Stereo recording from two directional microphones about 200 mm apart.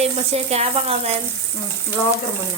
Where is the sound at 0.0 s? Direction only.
30° right (ahead or behind).